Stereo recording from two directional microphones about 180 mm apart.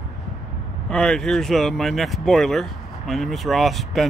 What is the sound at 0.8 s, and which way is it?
Speech, 5° left (ahead or behind).